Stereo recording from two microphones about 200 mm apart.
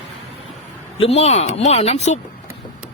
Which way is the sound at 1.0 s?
30° left (ahead or behind).